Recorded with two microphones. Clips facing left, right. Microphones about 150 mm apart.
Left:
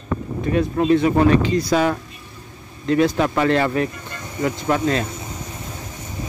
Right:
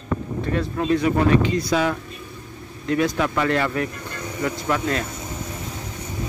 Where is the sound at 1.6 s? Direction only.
45° left (ahead or behind).